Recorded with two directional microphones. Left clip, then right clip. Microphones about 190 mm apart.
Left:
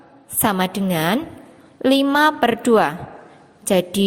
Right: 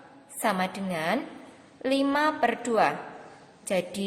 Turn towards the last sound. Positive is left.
turn(degrees=40)  # may be behind; listen again after turning